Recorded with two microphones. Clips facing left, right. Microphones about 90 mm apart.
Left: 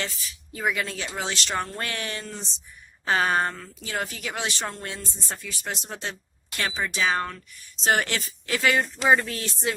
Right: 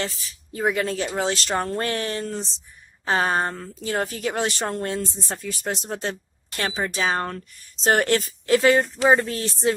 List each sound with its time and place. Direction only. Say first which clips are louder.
0.0 s a woman's voice: right 4 dB; 35° right (ahead or behind)